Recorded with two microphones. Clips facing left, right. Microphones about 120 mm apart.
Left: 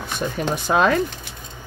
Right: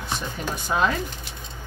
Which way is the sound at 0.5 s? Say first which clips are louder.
Left 5 dB; 70° left (ahead or behind).